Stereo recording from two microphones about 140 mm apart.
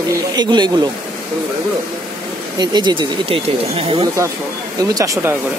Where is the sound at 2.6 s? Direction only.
30° right (ahead or behind).